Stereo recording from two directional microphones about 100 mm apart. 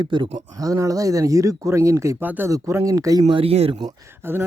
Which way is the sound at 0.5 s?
35° right (ahead or behind).